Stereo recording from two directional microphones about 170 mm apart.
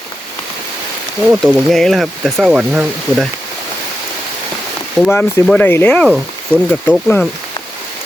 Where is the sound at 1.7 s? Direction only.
Centre (ahead or behind).